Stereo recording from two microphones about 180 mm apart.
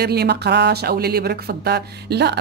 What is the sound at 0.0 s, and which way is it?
Speech, 65° right (ahead or behind).